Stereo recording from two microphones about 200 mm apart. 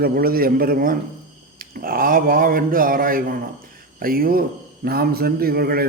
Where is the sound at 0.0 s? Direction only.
50° right (ahead or behind).